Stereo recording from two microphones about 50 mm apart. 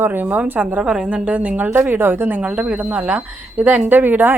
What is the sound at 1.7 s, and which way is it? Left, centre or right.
Speech, right.